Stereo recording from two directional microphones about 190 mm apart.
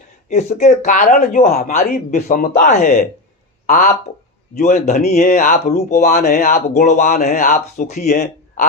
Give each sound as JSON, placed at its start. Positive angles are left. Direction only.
{"t": 0.3, "sound": "a man's voice", "side_deg": 40}